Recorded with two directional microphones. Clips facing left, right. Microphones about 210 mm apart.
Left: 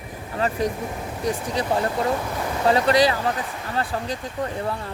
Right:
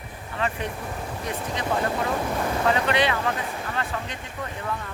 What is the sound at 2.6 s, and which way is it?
Speech, 35° left (ahead or behind).